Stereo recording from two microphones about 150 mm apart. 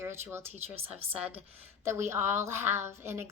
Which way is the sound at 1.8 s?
15° right (ahead or behind).